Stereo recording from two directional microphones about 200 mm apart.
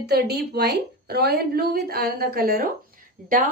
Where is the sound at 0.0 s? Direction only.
55° right (ahead or behind).